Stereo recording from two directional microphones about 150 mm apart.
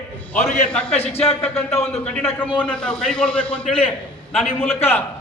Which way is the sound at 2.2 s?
10° left (ahead or behind).